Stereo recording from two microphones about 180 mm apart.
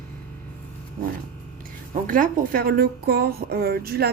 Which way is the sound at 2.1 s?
50° right (ahead or behind).